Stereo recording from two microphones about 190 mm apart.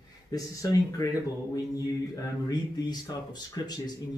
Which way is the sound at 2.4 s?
20° left (ahead or behind).